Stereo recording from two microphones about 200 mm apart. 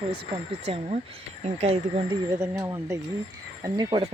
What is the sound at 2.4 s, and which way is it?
Speech, 10° right (ahead or behind).